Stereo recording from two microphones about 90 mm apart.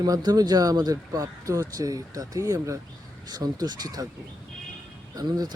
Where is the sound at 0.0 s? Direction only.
45° right (ahead or behind).